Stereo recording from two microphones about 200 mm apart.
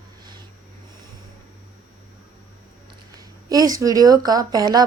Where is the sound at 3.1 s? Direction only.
20° right (ahead or behind).